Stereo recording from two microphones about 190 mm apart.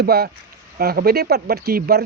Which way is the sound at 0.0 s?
55° right (ahead or behind).